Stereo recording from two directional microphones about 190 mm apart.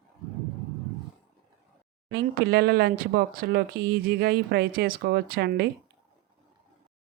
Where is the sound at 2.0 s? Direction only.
55° right (ahead or behind).